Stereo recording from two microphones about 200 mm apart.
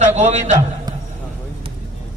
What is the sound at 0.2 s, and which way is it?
Speech, 35° right (ahead or behind).